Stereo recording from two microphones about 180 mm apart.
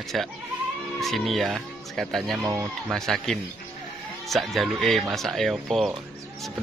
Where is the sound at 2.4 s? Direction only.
15° right (ahead or behind).